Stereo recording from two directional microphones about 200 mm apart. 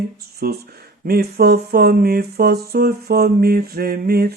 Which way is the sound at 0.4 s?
50° right (ahead or behind).